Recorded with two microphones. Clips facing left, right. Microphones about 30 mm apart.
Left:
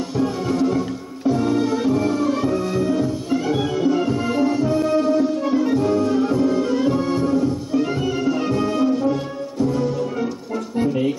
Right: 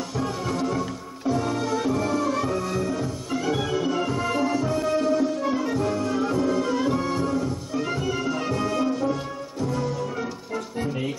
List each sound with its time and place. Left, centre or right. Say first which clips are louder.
0.2 s music: left 7 dB; centre